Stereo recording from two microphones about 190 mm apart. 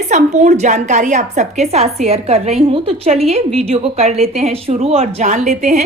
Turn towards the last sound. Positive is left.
turn(degrees=-40)  # may be behind; listen again after turning